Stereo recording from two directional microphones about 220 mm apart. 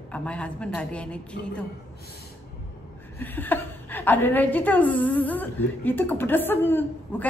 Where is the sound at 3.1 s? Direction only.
10° left (ahead or behind).